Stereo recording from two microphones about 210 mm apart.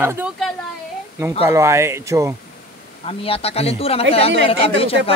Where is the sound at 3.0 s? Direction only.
30° left (ahead or behind).